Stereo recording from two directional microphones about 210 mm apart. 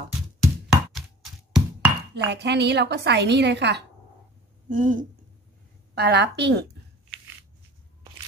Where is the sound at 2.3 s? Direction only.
55° right (ahead or behind).